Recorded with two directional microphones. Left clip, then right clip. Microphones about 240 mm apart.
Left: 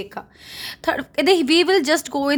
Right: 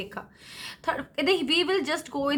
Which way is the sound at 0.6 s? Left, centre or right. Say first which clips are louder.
Left 7 dB; left.